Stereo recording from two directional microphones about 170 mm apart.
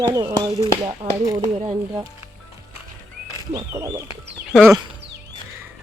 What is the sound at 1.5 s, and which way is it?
Speech, 35° right (ahead or behind).